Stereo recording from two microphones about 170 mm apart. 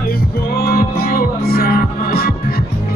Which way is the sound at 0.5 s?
60° left (ahead or behind).